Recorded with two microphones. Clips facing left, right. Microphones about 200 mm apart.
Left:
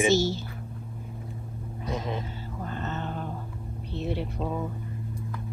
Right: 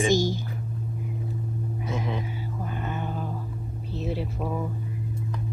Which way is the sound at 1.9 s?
15° left (ahead or behind).